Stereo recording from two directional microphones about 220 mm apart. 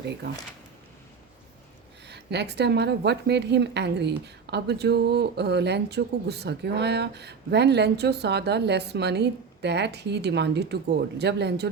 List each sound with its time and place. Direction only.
2.0 s a woman's voice: 50° right (ahead or behind)